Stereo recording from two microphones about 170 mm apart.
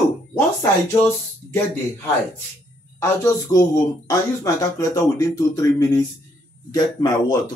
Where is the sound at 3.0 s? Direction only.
20° left (ahead or behind).